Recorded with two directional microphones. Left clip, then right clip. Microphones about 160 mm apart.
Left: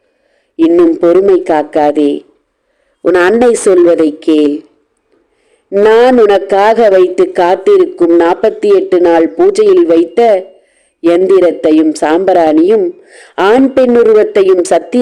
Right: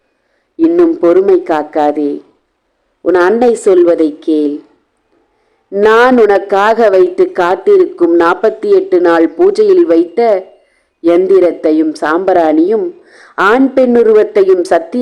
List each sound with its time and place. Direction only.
0.6 s a man's voice: 20° left (ahead or behind)
3.0 s a man's voice: 35° left (ahead or behind)
5.8 s a man's voice: 20° left (ahead or behind)